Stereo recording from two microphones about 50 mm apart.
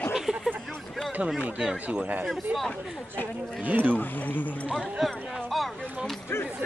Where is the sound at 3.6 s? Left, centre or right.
Right.